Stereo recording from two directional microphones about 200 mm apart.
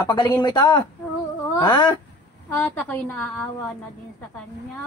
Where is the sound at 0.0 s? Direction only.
20° left (ahead or behind).